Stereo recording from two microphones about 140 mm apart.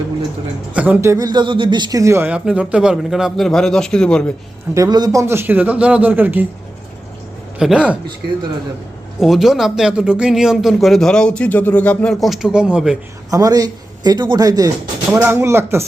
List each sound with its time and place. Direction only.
0.7 s a man's voice: 10° right (ahead or behind)
1.0 s speech: 25° right (ahead or behind); by 4.3 s 5° left (ahead or behind)
4.7 s a man's voice: 25° right (ahead or behind)
7.6 s a man's voice: 5° right (ahead or behind)
9.2 s speech: centre (ahead or behind)
13.3 s a man's voice: 25° right (ahead or behind)